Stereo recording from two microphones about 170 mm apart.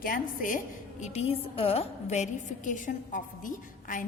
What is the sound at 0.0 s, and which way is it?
A woman's voice, 55° left (ahead or behind).